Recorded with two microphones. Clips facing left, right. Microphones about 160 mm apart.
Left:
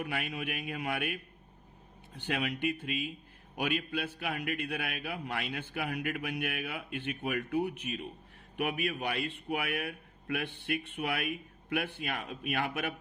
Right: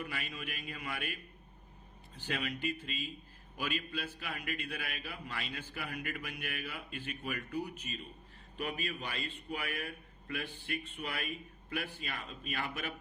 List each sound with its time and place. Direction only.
0.0 s a man's voice: 60° left (ahead or behind)